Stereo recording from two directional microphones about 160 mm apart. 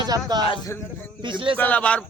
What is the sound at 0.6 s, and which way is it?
Speech, 15° left (ahead or behind).